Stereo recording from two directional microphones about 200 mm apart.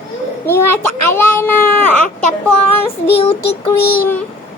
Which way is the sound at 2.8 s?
30° left (ahead or behind).